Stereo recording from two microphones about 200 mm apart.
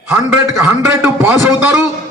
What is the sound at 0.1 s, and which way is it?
A man's voice, 15° right (ahead or behind).